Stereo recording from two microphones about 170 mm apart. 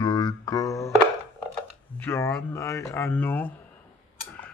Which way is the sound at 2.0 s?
15° left (ahead or behind).